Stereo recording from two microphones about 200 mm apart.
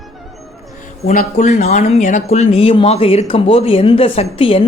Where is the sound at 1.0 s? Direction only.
40° left (ahead or behind).